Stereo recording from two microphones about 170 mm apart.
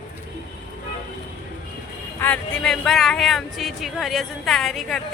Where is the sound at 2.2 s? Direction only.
10° left (ahead or behind).